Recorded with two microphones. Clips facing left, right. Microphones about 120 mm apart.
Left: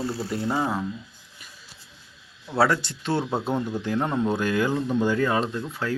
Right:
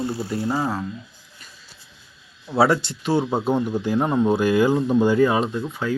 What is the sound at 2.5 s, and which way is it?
Speech, 15° right (ahead or behind).